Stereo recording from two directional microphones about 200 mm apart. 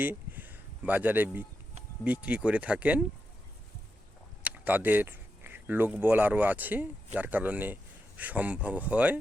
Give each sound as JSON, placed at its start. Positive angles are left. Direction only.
{"t": 0.0, "sound": "a sound", "side_deg": -10}
{"t": 2.0, "sound": "speech", "side_deg": -5}
{"t": 4.4, "sound": "speech", "side_deg": -10}